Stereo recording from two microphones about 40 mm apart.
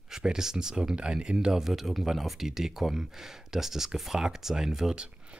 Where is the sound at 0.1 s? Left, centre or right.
Centre.